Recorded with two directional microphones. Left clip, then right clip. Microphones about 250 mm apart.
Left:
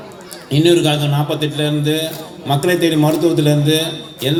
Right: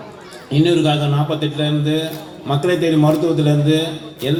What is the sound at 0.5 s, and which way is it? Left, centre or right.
A man's voice, left.